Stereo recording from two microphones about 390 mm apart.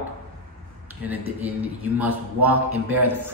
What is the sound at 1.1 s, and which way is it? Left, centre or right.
A man's voice, centre.